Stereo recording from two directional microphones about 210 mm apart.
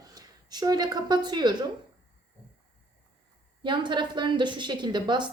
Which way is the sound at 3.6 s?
20° right (ahead or behind).